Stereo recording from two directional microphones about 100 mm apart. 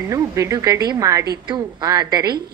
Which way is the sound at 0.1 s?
35° right (ahead or behind).